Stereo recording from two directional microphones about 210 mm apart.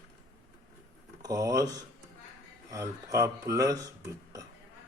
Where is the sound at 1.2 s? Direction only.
15° right (ahead or behind).